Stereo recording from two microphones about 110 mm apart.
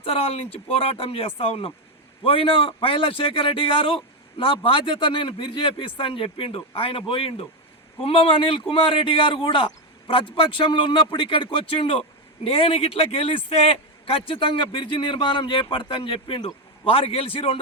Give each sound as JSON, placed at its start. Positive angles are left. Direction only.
{"t": 0.0, "sound": "a man's voice", "side_deg": 60}